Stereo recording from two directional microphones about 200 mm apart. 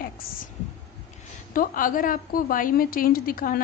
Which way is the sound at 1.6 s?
45° left (ahead or behind).